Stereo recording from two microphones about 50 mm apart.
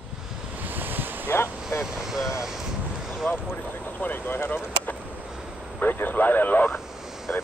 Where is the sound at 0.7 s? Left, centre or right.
Right.